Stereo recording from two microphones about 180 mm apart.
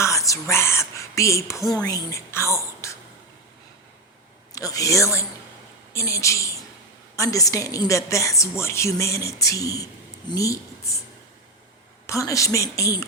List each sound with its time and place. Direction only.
0.0 s whispering: 15° left (ahead or behind)
4.5 s a woman's voice: 20° left (ahead or behind)
12.0 s a woman's voice: 15° left (ahead or behind)